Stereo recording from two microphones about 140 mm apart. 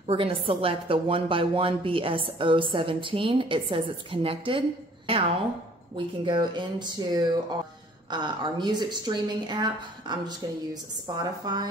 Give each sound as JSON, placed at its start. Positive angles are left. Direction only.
{"t": 0.0, "sound": "a woman's voice", "side_deg": -40}